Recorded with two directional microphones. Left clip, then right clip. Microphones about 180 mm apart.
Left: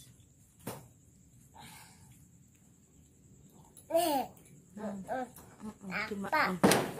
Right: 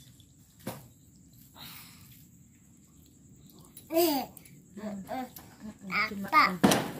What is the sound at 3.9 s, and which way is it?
Speech, 20° left (ahead or behind).